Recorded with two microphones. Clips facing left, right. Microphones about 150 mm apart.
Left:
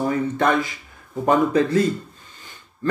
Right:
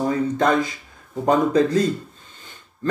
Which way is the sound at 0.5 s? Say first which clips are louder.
Right 1 dB; 20° right (ahead or behind).